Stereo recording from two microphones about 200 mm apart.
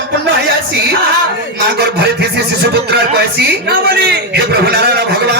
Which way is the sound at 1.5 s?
55° right (ahead or behind).